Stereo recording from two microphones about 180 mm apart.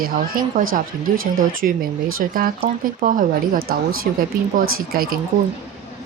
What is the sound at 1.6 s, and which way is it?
Speech, 55° right (ahead or behind).